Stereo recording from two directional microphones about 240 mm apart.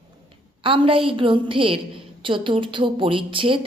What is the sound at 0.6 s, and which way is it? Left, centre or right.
Speech, right.